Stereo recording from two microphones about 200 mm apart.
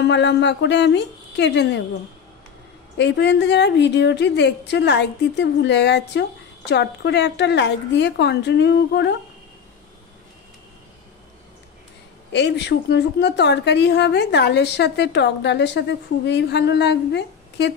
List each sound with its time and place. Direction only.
0.0 s a woman's voice: 60° left (ahead or behind)
3.0 s a woman's voice: 60° left (ahead or behind)
12.3 s a woman's voice: 60° left (ahead or behind)